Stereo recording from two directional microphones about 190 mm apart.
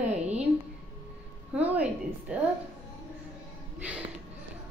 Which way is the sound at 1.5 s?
5° right (ahead or behind).